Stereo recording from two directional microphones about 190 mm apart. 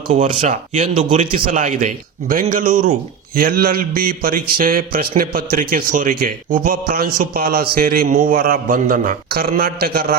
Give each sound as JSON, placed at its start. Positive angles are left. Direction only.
{"t": 0.1, "sound": "a man's voice", "side_deg": -35}